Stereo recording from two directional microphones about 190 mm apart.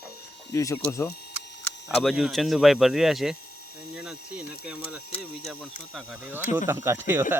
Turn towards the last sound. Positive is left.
turn(degrees=-10)  # may be behind; listen again after turning